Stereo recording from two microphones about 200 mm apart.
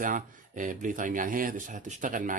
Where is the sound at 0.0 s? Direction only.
40° right (ahead or behind).